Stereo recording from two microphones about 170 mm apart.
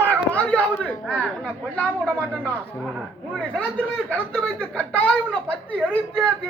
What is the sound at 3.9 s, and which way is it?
A child's voice, 10° left (ahead or behind).